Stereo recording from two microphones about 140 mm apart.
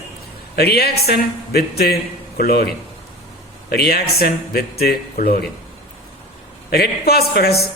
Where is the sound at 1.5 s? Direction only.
90° left.